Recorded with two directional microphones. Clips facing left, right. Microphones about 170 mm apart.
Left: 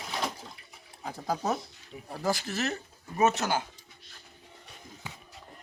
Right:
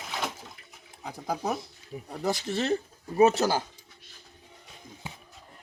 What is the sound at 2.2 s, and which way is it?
Speech, 25° right (ahead or behind).